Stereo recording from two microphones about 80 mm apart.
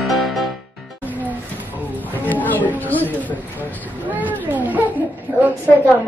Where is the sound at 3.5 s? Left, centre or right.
Right.